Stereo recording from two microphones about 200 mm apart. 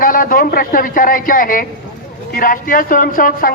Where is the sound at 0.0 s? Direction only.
45° left (ahead or behind).